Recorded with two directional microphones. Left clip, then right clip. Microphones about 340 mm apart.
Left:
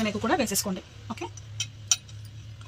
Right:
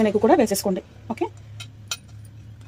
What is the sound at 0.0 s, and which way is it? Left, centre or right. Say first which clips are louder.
Speech: right 9 dB; centre.